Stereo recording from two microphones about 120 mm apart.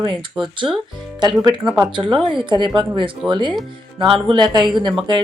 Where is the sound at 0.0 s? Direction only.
45° right (ahead or behind).